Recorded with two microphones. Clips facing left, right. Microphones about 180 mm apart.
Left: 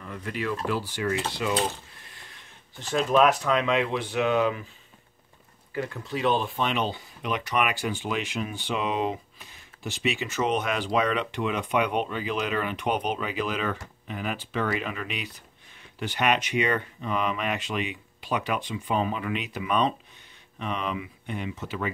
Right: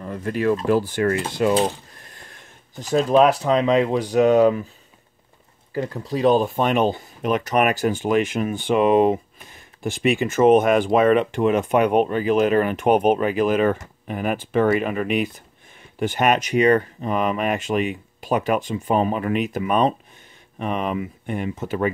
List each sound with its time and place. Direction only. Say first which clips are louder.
0.0 s speech: right 9 dB; 40° right (ahead or behind); by 1.2 s 55° right (ahead or behind)
1.3 s a sound: right 8 dB; 45° right (ahead or behind)
2.9 s speech: right 5 dB; 35° right (ahead or behind)
5.8 s speech: right 6 dB; 35° right (ahead or behind)